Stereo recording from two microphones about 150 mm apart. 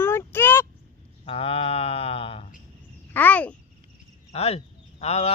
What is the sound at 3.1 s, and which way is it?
Speech, 10° left (ahead or behind).